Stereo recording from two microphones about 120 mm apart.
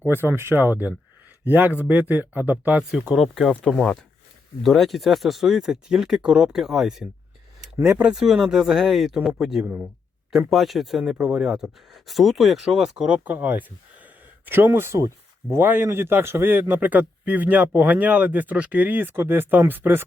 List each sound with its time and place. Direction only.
0.0 s speech: 15° right (ahead or behind)
3.2 s speech: centre (ahead or behind); by 20.1 s 15° right (ahead or behind)